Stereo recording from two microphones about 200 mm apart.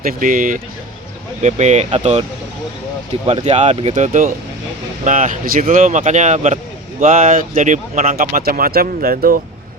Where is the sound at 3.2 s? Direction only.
30° right (ahead or behind).